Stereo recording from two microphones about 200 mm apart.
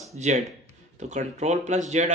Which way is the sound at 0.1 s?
35° right (ahead or behind).